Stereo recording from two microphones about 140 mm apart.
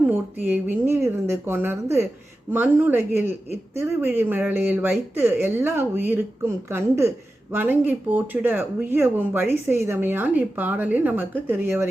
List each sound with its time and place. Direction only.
0.1 s speech: 15° right (ahead or behind)